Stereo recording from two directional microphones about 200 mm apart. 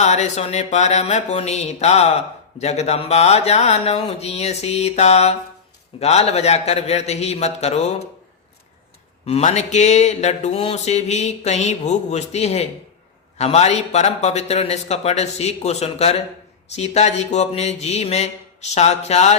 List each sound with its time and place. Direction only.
0.0 s speech: 35° left (ahead or behind)
9.2 s speech: 35° left (ahead or behind)